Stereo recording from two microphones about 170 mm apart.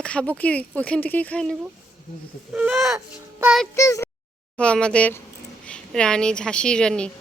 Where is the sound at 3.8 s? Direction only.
15° left (ahead or behind).